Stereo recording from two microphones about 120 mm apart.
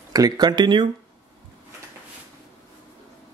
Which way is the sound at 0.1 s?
35° right (ahead or behind).